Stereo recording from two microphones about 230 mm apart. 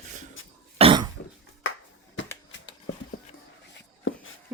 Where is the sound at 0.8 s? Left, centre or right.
Right.